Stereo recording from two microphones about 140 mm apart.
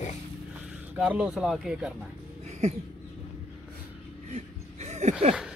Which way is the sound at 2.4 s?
50° right (ahead or behind).